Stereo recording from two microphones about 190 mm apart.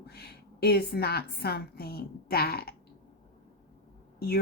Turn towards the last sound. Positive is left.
turn(degrees=55)  # may be behind; listen again after turning